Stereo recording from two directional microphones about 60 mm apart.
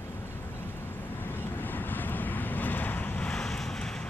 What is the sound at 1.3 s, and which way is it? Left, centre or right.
Vehicle, left.